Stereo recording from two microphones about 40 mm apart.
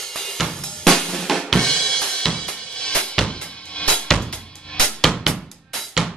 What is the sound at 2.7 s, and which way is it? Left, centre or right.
Drum, left.